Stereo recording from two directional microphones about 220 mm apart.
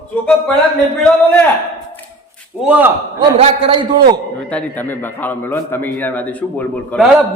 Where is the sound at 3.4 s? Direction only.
25° right (ahead or behind).